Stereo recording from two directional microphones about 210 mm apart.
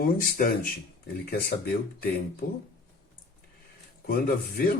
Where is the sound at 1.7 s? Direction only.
45° left (ahead or behind).